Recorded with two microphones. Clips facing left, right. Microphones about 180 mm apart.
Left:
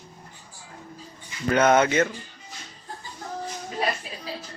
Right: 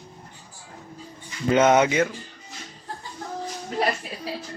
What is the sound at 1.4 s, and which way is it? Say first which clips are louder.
Speech: right 1 dB; 20° right (ahead or behind).